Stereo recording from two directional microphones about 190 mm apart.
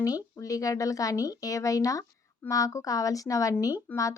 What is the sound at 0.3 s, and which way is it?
Speech, 15° left (ahead or behind).